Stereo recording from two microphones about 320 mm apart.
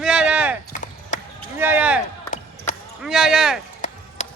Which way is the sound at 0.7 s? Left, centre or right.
Left.